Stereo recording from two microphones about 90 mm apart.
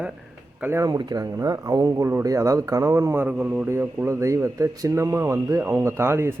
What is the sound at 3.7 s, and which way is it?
Speech, 30° right (ahead or behind).